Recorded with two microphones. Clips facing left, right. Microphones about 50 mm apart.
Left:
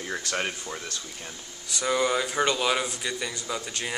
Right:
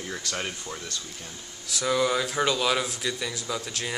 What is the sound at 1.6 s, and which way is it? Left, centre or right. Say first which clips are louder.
A man's voice: even; centre.